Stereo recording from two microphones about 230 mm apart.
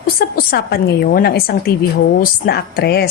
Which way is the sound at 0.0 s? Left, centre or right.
Left.